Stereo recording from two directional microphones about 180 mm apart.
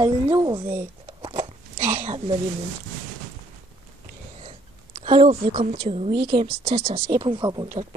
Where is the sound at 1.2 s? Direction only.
30° right (ahead or behind).